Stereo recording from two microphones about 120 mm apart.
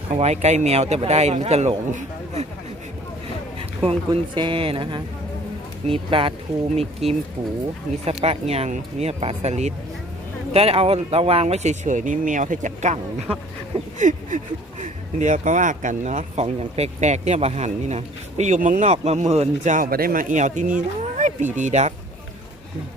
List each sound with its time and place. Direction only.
0.1 s speech: 65° right (ahead or behind)
3.8 s speech: 45° right (ahead or behind)
6.7 s speech: 60° right (ahead or behind)
10.5 s speech: 55° right (ahead or behind); by 21.9 s 75° right (ahead or behind)